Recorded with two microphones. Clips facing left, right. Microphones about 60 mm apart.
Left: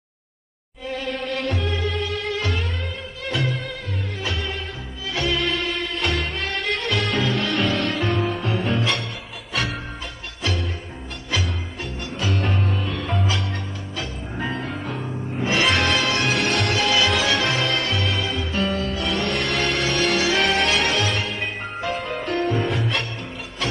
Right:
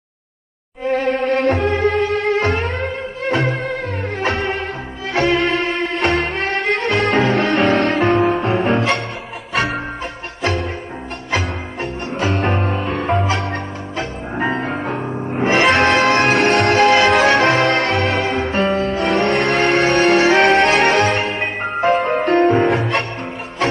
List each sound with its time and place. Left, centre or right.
0.8 s music: right